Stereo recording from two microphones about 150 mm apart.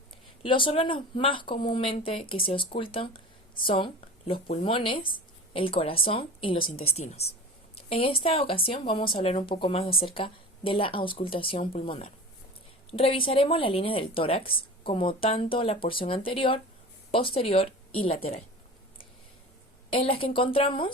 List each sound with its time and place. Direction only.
0.4 s a woman's voice: 35° left (ahead or behind)
19.9 s a woman's voice: 35° left (ahead or behind)